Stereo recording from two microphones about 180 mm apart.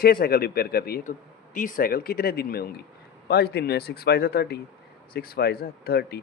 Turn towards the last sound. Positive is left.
turn(degrees=60)  # may be behind; listen again after turning